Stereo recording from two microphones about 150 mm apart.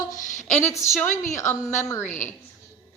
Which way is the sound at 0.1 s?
55° left (ahead or behind).